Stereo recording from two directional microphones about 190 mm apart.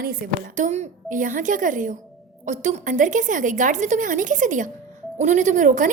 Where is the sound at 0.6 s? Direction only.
35° right (ahead or behind).